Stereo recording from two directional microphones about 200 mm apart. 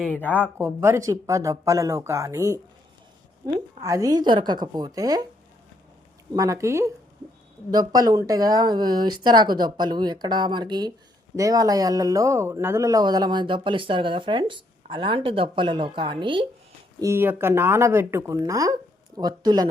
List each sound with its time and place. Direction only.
0.0 s speech: 10° left (ahead or behind)
0.6 s speech: 15° right (ahead or behind)
6.3 s speech: 15° right (ahead or behind)
17.0 s speech: 10° right (ahead or behind)